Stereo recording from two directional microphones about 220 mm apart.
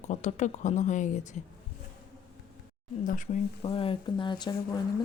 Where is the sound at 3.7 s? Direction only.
25° left (ahead or behind).